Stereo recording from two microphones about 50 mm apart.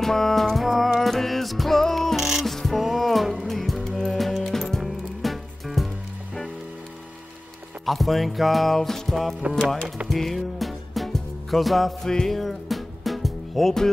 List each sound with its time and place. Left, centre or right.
0.0 s music: centre
2.1 s music: centre
7.8 s music: centre
12.1 s music: centre
12.4 s music: centre